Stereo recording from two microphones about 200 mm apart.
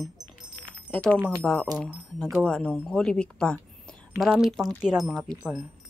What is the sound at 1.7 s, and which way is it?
Speech, centre (ahead or behind).